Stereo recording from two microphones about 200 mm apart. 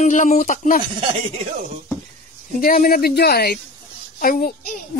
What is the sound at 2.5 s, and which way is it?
Speech, 45° left (ahead or behind).